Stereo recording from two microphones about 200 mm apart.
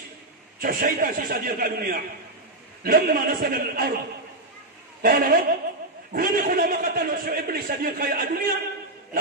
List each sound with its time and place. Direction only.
0.6 s a man's voice: 45° right (ahead or behind)
5.0 s a man's voice: 45° right (ahead or behind)